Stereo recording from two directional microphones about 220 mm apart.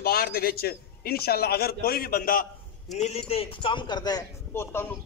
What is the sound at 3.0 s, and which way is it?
A man's voice, 30° left (ahead or behind).